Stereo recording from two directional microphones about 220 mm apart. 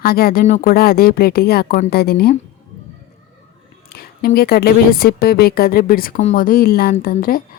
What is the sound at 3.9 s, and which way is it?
A woman's voice, 45° left (ahead or behind).